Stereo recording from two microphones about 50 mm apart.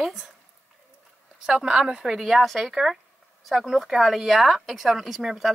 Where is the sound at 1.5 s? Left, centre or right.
Centre.